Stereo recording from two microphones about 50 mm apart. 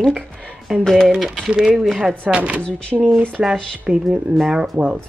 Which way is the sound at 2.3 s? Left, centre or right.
Right.